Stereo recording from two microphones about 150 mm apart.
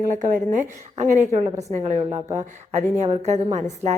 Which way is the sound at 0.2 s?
60° right (ahead or behind).